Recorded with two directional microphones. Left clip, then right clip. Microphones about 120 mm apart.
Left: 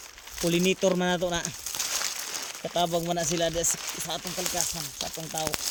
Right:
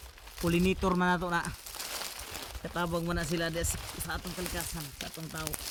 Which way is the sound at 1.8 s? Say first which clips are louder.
Left 8 dB; 30° left (ahead or behind).